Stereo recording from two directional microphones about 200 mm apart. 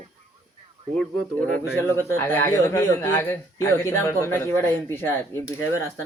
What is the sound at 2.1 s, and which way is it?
Speech, 10° left (ahead or behind).